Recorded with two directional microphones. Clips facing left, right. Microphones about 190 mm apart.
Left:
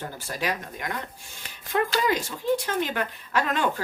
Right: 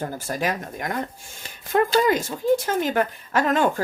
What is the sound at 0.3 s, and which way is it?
Speech, 45° right (ahead or behind).